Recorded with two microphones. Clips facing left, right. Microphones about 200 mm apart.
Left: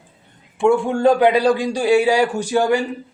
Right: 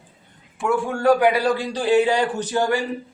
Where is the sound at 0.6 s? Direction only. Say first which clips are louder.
Left 5 dB; 25° left (ahead or behind).